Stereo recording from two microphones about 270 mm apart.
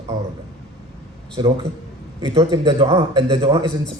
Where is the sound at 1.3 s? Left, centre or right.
Right.